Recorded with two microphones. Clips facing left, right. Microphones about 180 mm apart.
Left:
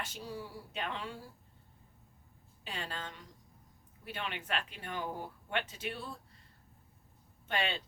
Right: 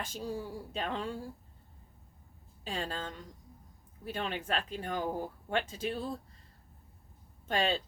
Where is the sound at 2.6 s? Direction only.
40° right (ahead or behind).